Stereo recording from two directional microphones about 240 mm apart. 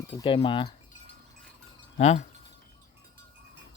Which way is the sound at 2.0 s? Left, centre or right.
Left.